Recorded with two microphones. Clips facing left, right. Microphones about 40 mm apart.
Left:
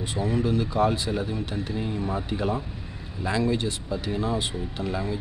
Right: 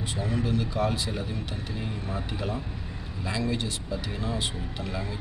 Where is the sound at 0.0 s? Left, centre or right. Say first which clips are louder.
Left 4 dB; centre.